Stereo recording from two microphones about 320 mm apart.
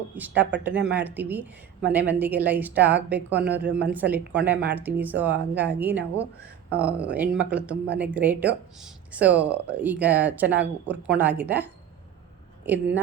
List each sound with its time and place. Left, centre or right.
0.7 s speech: right
0.9 s speech: centre